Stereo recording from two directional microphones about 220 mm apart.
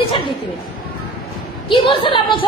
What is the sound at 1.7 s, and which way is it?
Speech, 25° left (ahead or behind).